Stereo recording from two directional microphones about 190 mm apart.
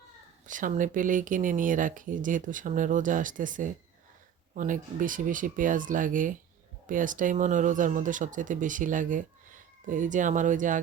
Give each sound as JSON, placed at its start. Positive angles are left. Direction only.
{"t": 0.4, "sound": "speech", "side_deg": -45}